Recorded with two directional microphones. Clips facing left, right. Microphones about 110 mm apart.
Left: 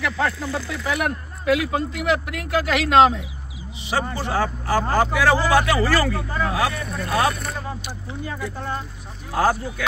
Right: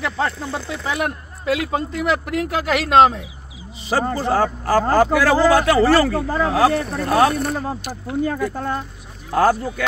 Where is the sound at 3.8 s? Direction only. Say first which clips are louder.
Right 5 dB; 40° right (ahead or behind).